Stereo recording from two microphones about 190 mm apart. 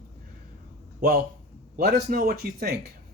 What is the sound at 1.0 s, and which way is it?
A man's voice, 50° right (ahead or behind).